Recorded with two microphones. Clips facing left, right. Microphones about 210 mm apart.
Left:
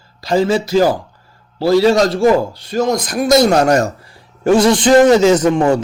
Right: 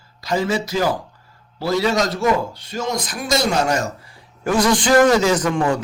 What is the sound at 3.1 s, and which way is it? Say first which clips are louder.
Speech: left 10 dB; 50° left (ahead or behind).